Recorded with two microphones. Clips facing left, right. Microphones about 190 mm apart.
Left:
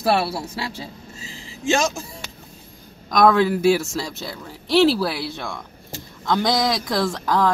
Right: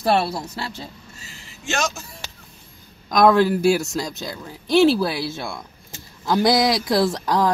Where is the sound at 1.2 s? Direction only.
90° left.